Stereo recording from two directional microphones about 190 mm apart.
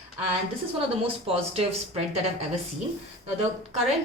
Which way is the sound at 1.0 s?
30° right (ahead or behind).